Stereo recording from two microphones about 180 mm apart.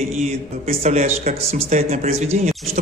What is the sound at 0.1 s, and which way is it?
A man's voice, 35° right (ahead or behind).